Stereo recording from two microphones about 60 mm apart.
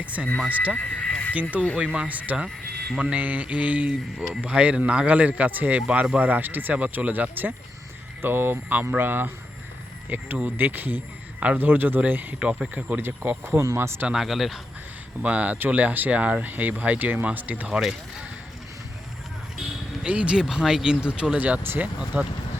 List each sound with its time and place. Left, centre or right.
0.0 s speech: right
0.3 s speech: left
0.8 s horse: left
1.7 s a man's voice: right
12.4 s speech: centre
12.7 s a man's voice: right
14.1 s speech: centre
15.2 s speech: right
17.7 s speech: centre
20.0 s speech: centre
20.4 s speech: centre
21.6 s a man's voice: right